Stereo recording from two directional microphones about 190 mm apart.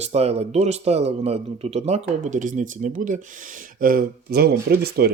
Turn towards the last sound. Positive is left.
turn(degrees=-55)  # may be behind; listen again after turning